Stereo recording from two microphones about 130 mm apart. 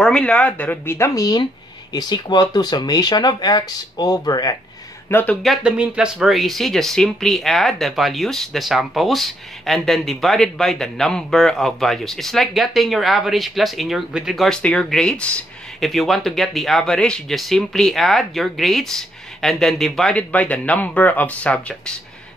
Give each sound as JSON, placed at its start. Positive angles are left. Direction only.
{"t": 0.0, "sound": "speech", "side_deg": 10}
{"t": 5.1, "sound": "speech", "side_deg": 10}
{"t": 5.4, "sound": "speech", "side_deg": -5}